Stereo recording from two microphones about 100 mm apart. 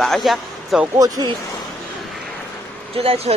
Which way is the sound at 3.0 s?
85° right.